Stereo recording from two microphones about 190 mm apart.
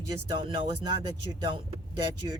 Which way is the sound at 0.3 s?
25° right (ahead or behind).